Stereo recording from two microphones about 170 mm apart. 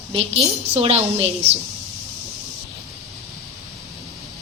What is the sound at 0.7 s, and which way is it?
Speech, 40° right (ahead or behind).